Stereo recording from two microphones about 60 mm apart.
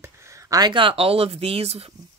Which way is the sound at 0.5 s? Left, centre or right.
Right.